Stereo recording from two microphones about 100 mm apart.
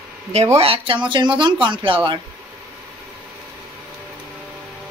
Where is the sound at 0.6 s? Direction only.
65° right (ahead or behind).